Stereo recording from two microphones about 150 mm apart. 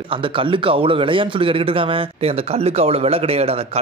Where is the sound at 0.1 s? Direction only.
35° right (ahead or behind).